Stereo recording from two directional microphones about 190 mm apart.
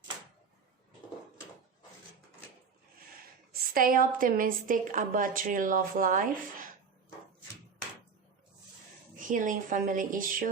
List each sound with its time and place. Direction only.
3.5 s a woman's voice: 50° right (ahead or behind)
9.1 s a woman's voice: 45° right (ahead or behind)